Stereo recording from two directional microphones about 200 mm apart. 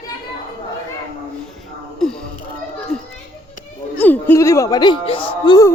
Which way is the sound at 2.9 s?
Centre (ahead or behind).